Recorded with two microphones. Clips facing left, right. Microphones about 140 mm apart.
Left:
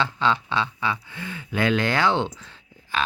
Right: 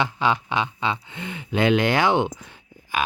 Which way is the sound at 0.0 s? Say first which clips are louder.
Right 1 dB; 15° right (ahead or behind).